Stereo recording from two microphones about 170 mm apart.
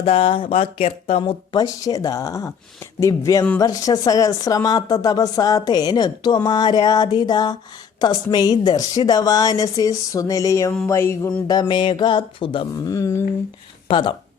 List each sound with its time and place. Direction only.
0.0 s a woman's voice: 35° left (ahead or behind); by 10.7 s 20° left (ahead or behind)
10.8 s music: 15° left (ahead or behind)
11.7 s a woman's voice: 30° left (ahead or behind)
13.8 s speech: 30° left (ahead or behind)